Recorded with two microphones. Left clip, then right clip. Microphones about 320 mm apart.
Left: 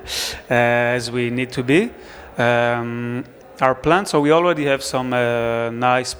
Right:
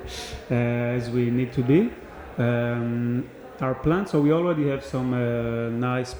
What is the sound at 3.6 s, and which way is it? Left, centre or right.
A man's voice, left.